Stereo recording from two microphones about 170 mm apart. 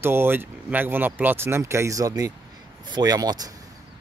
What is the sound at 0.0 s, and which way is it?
Speech, 15° right (ahead or behind).